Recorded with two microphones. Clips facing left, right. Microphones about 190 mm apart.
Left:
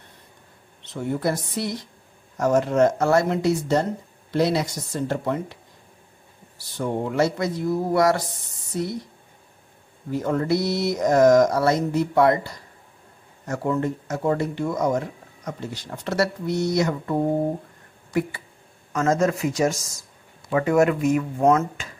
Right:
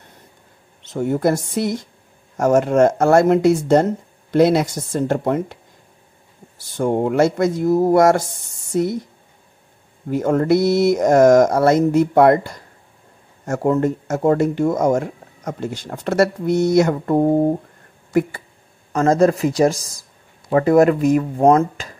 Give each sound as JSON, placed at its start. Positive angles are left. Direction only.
{"t": 0.8, "sound": "speech", "side_deg": -45}
{"t": 6.8, "sound": "speech", "side_deg": -50}
{"t": 10.1, "sound": "speech", "side_deg": -50}
{"t": 18.9, "sound": "speech", "side_deg": -35}